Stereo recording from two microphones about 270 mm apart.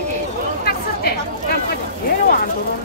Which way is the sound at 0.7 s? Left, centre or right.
Left.